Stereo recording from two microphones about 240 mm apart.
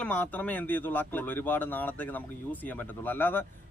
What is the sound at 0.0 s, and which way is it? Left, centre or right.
Speech, centre.